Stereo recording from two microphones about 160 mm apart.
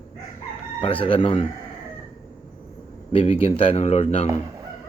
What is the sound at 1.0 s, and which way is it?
Speech, 35° left (ahead or behind).